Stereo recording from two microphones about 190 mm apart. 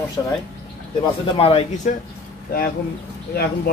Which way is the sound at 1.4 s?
30° left (ahead or behind).